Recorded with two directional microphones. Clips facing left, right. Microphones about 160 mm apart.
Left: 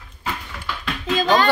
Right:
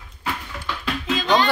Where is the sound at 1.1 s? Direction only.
45° left (ahead or behind).